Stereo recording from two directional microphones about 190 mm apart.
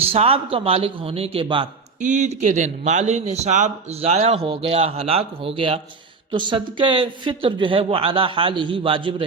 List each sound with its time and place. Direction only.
0.1 s speech: 30° right (ahead or behind)
2.0 s a man's voice: 40° right (ahead or behind)